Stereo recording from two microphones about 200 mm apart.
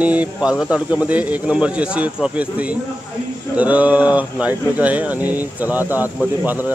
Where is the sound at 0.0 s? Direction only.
5° right (ahead or behind).